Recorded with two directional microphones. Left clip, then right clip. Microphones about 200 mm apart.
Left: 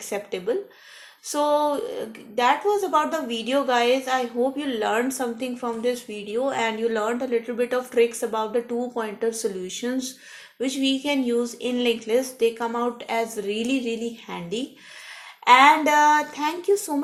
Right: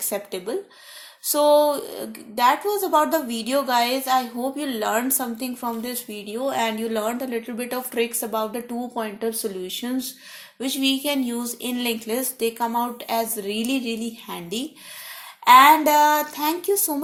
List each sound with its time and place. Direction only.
0.1 s a woman's voice: 40° right (ahead or behind)